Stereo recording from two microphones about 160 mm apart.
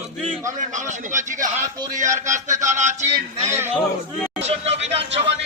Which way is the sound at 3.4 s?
15° right (ahead or behind).